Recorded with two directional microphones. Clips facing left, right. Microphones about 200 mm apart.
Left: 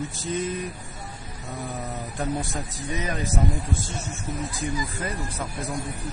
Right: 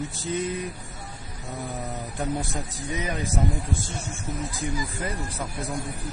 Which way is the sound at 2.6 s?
15° right (ahead or behind).